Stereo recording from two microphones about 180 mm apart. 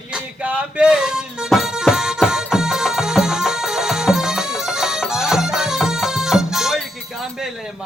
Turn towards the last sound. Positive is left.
turn(degrees=0)  # may be behind; listen again after turning